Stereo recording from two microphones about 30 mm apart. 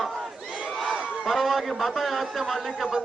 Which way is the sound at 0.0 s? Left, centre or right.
Centre.